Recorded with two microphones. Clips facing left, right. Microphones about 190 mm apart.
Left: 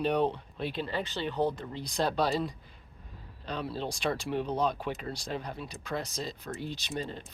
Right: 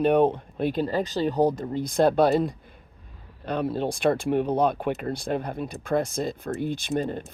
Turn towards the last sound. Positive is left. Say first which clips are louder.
# right 9 dB
turn(degrees=-55)  # may be behind; listen again after turning